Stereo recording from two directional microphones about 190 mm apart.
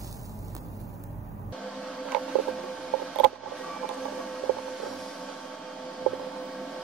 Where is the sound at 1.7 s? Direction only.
Centre (ahead or behind).